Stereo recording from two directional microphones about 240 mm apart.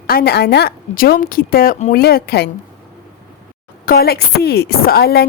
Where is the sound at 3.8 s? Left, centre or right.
Left.